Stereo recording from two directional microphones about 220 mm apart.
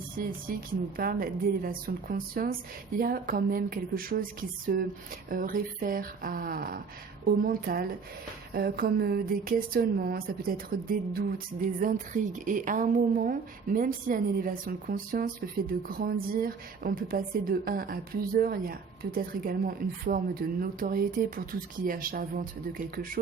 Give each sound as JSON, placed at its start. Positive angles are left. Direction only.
{"t": 0.9, "sound": "a woman's voice", "side_deg": -40}